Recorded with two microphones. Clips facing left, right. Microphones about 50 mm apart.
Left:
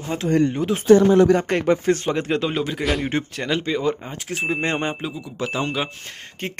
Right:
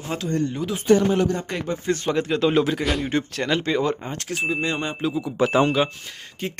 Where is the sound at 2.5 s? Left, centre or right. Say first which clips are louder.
Right 2 dB; centre.